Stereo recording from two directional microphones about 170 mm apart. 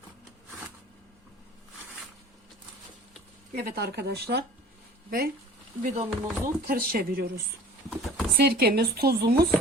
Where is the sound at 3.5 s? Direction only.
60° right (ahead or behind).